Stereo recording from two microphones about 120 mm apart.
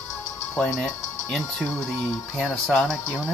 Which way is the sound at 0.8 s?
5° left (ahead or behind).